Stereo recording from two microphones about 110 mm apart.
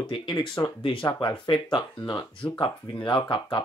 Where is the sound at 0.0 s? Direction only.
45° left (ahead or behind).